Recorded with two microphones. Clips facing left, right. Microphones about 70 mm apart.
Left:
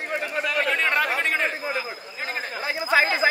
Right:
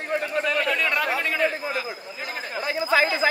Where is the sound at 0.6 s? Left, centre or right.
Left.